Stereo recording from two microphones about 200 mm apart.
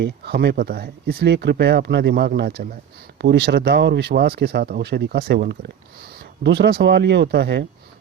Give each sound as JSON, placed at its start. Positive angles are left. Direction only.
{"t": 0.0, "sound": "speech", "side_deg": -55}